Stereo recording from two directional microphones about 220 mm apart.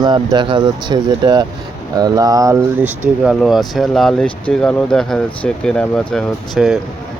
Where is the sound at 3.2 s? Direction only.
Centre (ahead or behind).